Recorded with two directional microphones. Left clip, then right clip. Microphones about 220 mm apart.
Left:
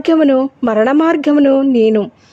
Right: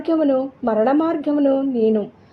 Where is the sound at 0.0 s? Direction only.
30° left (ahead or behind).